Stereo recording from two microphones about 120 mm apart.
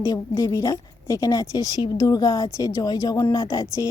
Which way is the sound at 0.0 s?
30° left (ahead or behind).